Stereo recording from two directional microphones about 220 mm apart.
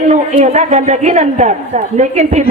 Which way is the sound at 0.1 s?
30° right (ahead or behind).